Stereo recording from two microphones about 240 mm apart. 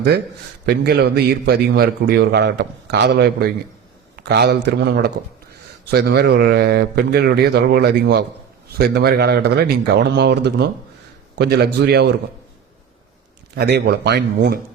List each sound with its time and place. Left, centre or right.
0.6 s a man's voice: right
13.6 s a man's voice: right